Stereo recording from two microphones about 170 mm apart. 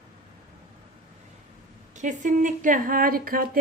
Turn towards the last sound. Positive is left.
turn(degrees=-55)  # may be behind; listen again after turning